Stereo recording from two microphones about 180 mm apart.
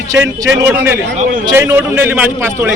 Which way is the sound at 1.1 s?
40° right (ahead or behind).